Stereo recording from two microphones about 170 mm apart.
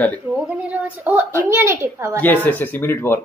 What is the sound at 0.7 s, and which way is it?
A woman's voice, 10° right (ahead or behind).